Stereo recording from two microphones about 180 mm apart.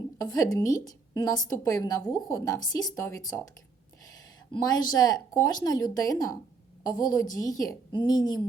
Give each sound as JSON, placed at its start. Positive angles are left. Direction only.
{"t": 0.2, "sound": "speech", "side_deg": 20}
{"t": 4.5, "sound": "speech", "side_deg": 25}